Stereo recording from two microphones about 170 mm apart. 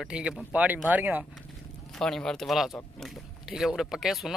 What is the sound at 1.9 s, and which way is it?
Speech, 5° left (ahead or behind).